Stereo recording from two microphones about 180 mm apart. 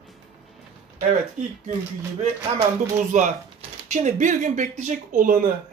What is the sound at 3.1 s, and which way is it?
Speech, 40° right (ahead or behind).